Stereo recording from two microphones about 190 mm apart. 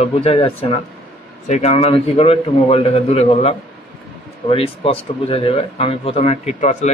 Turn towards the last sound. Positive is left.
turn(degrees=35)  # may be behind; listen again after turning